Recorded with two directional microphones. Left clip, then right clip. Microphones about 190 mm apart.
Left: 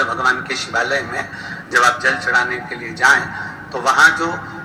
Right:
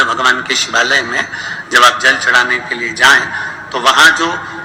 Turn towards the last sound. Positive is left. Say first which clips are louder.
# right 4 dB
turn(degrees=-25)  # may be behind; listen again after turning